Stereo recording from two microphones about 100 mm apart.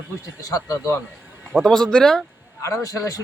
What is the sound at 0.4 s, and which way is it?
Speech, 35° left (ahead or behind).